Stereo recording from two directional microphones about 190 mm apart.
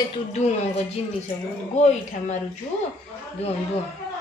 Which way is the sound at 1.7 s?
35° left (ahead or behind).